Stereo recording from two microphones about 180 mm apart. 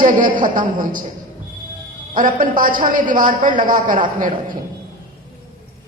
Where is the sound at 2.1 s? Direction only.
50° right (ahead or behind).